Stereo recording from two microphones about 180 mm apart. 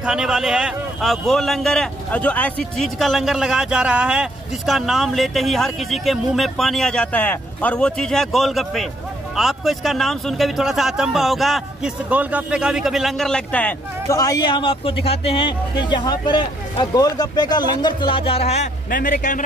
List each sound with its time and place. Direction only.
0.0 s a man's voice: 5° right (ahead or behind); by 18.7 s 35° left (ahead or behind)
18.9 s a man's voice: 55° left (ahead or behind)